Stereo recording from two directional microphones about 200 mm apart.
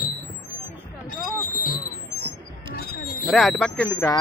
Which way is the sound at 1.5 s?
45° left (ahead or behind).